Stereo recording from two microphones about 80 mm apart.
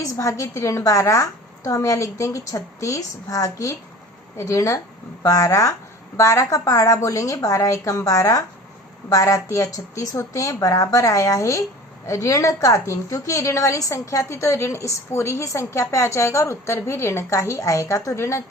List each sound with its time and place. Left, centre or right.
0.0 s a woman's voice: left